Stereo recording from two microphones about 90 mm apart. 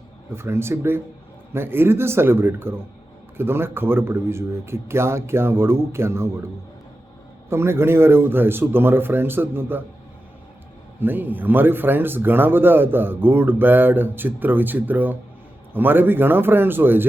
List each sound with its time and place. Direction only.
0.3 s speech: 25° right (ahead or behind)
7.5 s speech: 25° right (ahead or behind)
11.0 s speech: 20° right (ahead or behind)